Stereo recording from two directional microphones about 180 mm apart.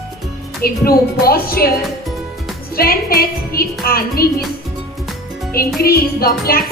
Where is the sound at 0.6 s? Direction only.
55° left (ahead or behind).